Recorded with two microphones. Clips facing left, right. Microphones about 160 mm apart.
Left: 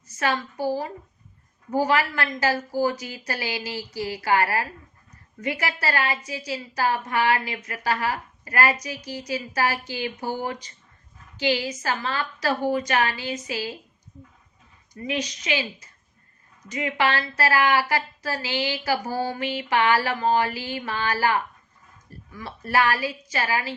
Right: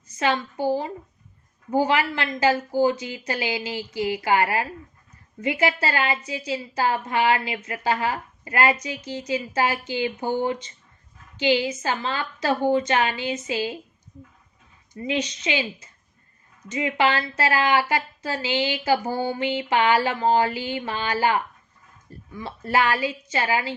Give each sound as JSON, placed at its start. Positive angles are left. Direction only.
{"t": 0.2, "sound": "a woman's voice", "side_deg": -20}
{"t": 14.9, "sound": "a woman's voice", "side_deg": -25}